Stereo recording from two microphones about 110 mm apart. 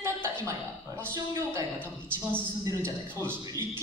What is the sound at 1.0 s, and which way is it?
A man's voice, 25° right (ahead or behind).